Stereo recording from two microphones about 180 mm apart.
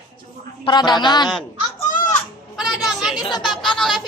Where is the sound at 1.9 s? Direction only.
45° left (ahead or behind).